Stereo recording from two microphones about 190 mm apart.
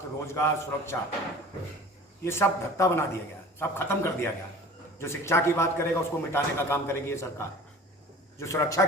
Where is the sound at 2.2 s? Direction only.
15° left (ahead or behind).